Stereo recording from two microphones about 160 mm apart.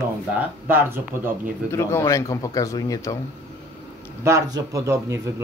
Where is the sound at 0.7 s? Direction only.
10° right (ahead or behind).